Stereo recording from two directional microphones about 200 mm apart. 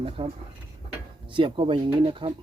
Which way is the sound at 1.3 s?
25° right (ahead or behind).